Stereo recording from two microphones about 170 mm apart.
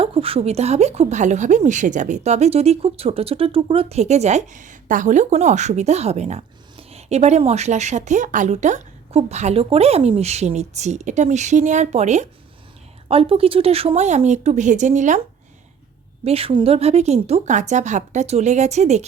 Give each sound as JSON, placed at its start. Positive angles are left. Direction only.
{"t": 0.0, "sound": "a woman's voice", "side_deg": -35}
{"t": 16.2, "sound": "a woman's voice", "side_deg": -35}